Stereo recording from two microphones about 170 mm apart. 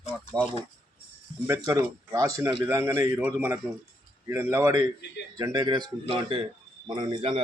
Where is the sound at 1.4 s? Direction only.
15° right (ahead or behind).